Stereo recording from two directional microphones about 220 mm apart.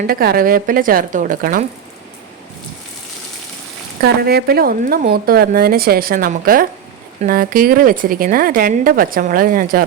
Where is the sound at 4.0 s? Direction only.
45° right (ahead or behind).